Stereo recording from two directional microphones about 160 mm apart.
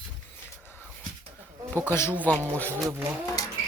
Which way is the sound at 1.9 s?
15° left (ahead or behind).